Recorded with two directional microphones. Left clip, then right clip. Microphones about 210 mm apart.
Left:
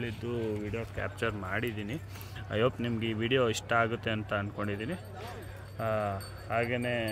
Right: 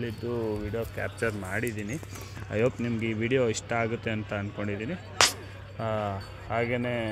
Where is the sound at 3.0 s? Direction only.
50° left (ahead or behind).